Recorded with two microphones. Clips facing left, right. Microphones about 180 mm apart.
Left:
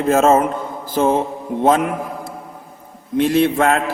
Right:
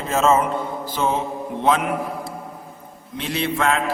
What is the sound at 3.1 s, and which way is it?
Speech, 50° left (ahead or behind).